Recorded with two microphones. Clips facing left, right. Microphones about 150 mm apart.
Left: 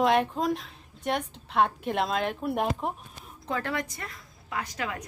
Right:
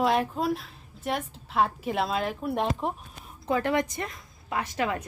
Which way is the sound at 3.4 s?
15° right (ahead or behind).